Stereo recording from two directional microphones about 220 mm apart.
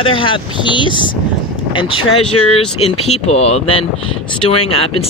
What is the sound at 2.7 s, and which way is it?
Speech, 25° left (ahead or behind).